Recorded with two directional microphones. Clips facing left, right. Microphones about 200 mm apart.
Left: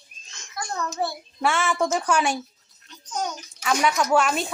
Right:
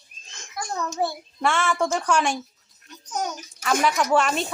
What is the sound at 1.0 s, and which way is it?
Speech, 15° right (ahead or behind).